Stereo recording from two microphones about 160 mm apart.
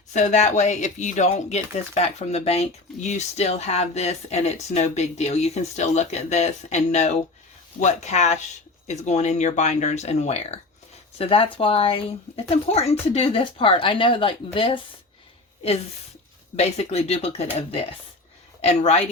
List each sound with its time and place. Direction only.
0.1 s speech: 50° left (ahead or behind)
16.6 s speech: 40° left (ahead or behind)